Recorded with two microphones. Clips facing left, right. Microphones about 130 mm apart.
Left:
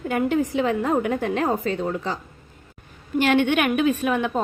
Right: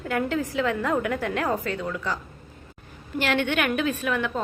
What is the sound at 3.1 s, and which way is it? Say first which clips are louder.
A woman's voice: left 5 dB; 15° left (ahead or behind).